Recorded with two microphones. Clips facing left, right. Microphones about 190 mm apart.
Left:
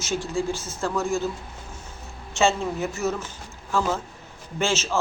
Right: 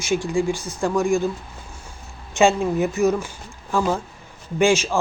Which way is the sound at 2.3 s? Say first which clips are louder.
Right 5 dB; 15° right (ahead or behind).